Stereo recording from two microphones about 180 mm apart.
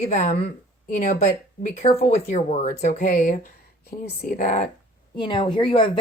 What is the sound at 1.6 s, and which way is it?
A woman's voice, 40° left (ahead or behind).